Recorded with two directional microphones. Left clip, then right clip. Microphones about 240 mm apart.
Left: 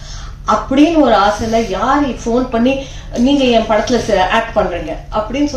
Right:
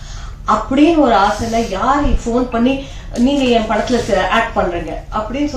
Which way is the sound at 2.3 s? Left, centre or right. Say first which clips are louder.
Left 2 dB; left.